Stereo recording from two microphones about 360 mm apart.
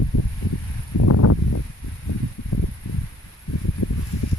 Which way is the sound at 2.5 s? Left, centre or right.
Left.